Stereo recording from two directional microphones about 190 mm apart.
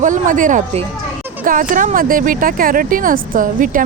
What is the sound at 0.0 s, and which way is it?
Speech, 45° right (ahead or behind).